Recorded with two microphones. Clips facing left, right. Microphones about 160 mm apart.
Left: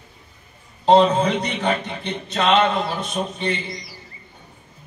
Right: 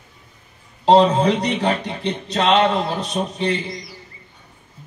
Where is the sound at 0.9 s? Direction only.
35° right (ahead or behind).